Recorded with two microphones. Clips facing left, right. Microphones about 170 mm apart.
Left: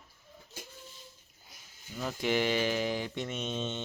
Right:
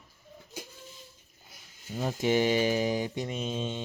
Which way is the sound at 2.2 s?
20° right (ahead or behind).